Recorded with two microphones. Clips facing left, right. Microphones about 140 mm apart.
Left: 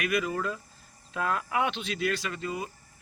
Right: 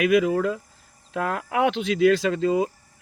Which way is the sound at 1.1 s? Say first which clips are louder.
Right 4 dB; 65° right (ahead or behind).